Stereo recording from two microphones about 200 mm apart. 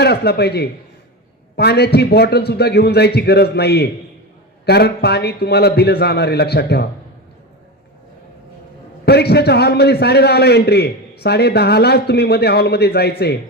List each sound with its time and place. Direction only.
0.0 s a man's voice: 55° left (ahead or behind)
9.0 s a man's voice: 55° left (ahead or behind)